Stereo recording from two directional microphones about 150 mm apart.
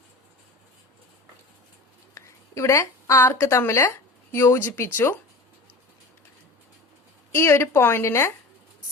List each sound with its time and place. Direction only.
2.1 s a woman's voice: 20° left (ahead or behind)
7.3 s a woman's voice: 15° left (ahead or behind)